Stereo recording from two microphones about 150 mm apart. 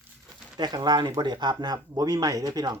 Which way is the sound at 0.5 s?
25° right (ahead or behind).